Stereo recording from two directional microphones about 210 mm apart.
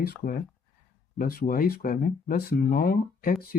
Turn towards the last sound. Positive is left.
turn(degrees=45)  # may be behind; listen again after turning